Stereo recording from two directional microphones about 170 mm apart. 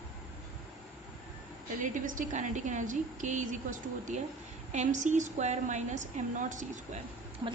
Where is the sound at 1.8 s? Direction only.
50° right (ahead or behind).